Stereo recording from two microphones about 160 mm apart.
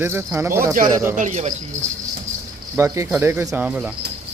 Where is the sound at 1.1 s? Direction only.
45° right (ahead or behind).